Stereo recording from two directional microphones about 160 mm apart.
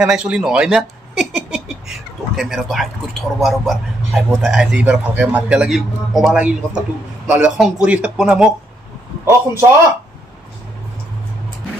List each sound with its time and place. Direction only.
0.0 s speech: 5° right (ahead or behind)
9.2 s a man's voice: 15° right (ahead or behind)